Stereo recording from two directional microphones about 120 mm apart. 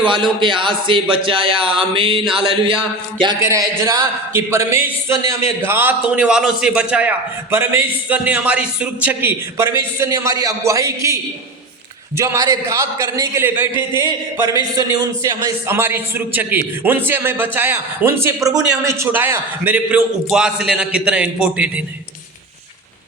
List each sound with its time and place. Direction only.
0.0 s a sound: 40° right (ahead or behind)
3.4 s a man's voice: 25° right (ahead or behind)
9.6 s a man's voice: 20° right (ahead or behind)
14.0 s a man's voice: 30° right (ahead or behind)
15.7 s a man's voice: 20° right (ahead or behind)